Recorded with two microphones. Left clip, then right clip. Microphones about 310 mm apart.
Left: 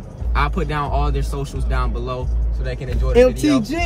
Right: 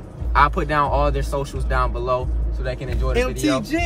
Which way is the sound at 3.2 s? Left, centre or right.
Centre.